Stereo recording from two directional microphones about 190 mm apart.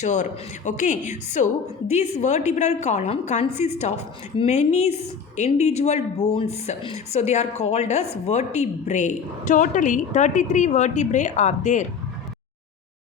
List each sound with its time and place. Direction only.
0.0 s a woman's voice: 40° left (ahead or behind)